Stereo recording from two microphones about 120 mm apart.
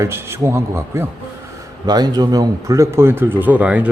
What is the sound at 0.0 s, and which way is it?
Speech, 20° right (ahead or behind).